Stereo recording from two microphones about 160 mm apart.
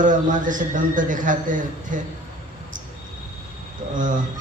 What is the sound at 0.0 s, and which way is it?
A man's voice, 55° right (ahead or behind).